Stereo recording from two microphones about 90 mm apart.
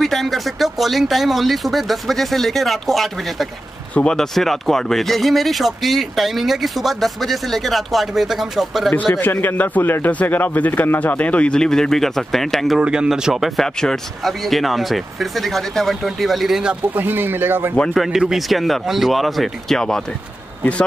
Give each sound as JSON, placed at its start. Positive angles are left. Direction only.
{"t": 0.0, "sound": "speech", "side_deg": 0}
{"t": 9.2, "sound": "speech", "side_deg": 20}
{"t": 12.8, "sound": "speech", "side_deg": -10}
{"t": 16.9, "sound": "speech", "side_deg": -20}
{"t": 17.9, "sound": "speech", "side_deg": -5}